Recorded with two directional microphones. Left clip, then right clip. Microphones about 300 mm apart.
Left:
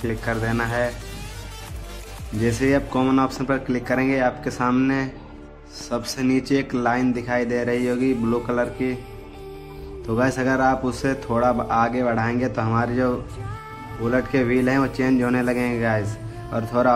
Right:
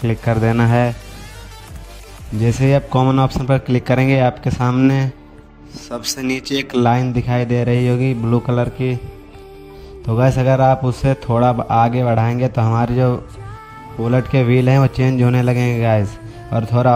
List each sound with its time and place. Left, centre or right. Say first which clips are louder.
0.0 s speech: right 6 dB; right
2.4 s a man's voice: right 3 dB; right
5.9 s a man's voice: even; centre
6.2 s a man's voice: even; right
10.0 s a man's voice: right 5 dB; right